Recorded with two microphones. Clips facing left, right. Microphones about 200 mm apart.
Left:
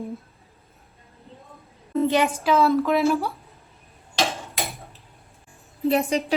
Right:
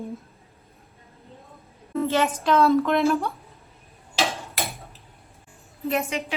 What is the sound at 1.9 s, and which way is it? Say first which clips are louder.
A woman's voice: left 2 dB; 15° left (ahead or behind).